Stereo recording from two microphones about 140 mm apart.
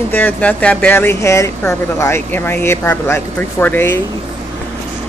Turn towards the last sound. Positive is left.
turn(degrees=15)  # may be behind; listen again after turning